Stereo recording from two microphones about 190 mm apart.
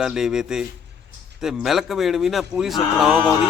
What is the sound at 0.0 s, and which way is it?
A man's voice, 5° right (ahead or behind).